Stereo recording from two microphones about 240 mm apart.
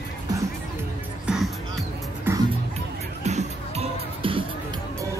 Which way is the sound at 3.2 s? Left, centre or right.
Right.